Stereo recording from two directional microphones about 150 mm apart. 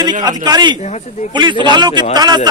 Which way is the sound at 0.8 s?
50° left (ahead or behind).